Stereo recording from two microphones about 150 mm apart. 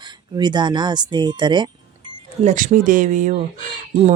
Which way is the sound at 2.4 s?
55° right (ahead or behind).